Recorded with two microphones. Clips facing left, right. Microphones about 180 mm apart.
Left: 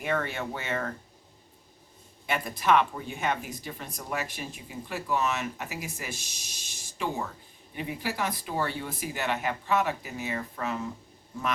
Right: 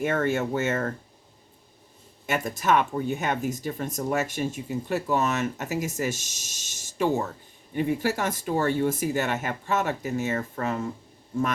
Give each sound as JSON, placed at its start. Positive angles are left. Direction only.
{"t": 0.0, "sound": "speech", "side_deg": -45}
{"t": 2.2, "sound": "speech", "side_deg": -45}